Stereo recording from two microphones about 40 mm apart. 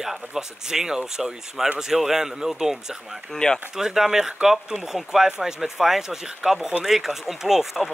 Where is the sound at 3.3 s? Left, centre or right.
Centre.